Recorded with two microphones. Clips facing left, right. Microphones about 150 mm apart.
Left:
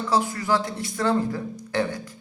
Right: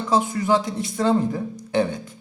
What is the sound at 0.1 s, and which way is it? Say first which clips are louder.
Speech: right 3 dB; 20° right (ahead or behind).